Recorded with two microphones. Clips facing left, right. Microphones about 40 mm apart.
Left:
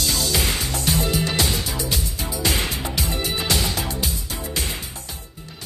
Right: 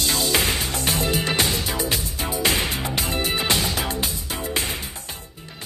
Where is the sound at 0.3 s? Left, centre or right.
Right.